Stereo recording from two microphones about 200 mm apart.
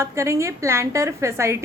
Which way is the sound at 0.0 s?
15° right (ahead or behind).